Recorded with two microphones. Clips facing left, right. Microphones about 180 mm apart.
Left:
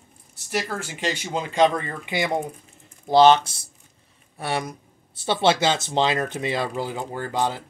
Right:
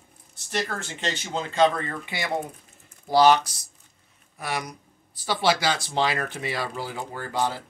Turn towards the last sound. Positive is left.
turn(degrees=20)  # may be behind; listen again after turning